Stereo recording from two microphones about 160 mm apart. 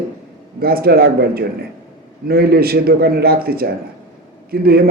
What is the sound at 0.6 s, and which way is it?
A man's voice, 70° right (ahead or behind).